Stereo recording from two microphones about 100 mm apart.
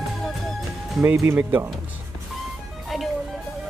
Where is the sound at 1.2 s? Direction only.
20° right (ahead or behind).